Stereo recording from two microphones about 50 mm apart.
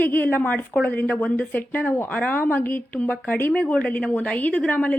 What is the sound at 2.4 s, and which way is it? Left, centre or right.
A woman's voice, left.